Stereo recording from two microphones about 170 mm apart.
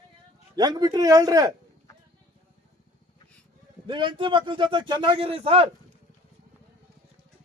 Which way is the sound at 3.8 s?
30° right (ahead or behind).